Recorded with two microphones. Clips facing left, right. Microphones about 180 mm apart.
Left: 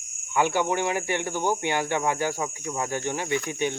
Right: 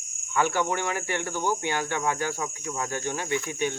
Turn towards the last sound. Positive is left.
turn(degrees=20)  # may be behind; listen again after turning